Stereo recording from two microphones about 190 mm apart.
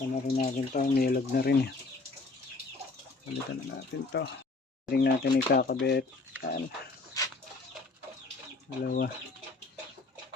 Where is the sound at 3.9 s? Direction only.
70° left (ahead or behind).